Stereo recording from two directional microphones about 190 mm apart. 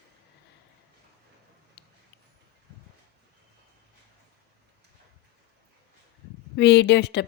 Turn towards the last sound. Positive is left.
turn(degrees=60)  # may be behind; listen again after turning